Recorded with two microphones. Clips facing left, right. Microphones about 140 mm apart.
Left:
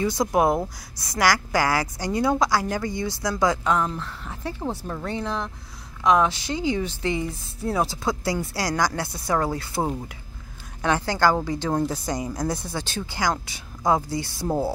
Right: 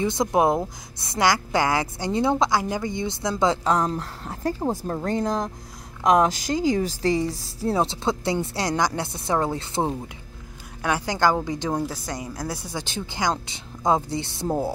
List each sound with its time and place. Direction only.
0.0 s speech: 20° right (ahead or behind)
3.6 s speech: 35° right (ahead or behind)
10.8 s a woman's voice: 10° right (ahead or behind)
11.8 s a woman's voice: centre (ahead or behind)
12.6 s speech: 15° right (ahead or behind)